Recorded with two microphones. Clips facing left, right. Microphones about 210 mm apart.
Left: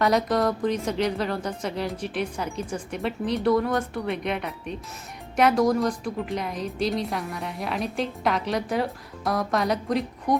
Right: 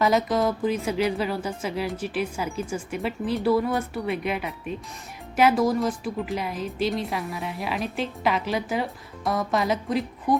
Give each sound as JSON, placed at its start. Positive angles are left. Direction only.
{"t": 0.0, "sound": "speech", "side_deg": 0}